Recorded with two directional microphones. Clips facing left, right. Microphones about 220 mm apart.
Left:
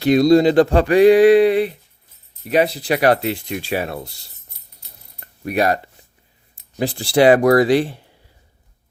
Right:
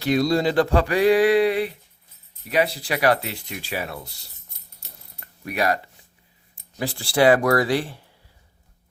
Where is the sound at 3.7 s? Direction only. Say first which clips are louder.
Left 6 dB; 55° left (ahead or behind).